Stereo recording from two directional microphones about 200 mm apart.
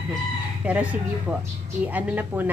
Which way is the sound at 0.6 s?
5° right (ahead or behind).